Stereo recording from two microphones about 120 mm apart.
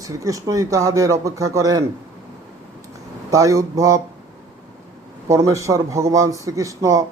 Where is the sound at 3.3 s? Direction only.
25° right (ahead or behind).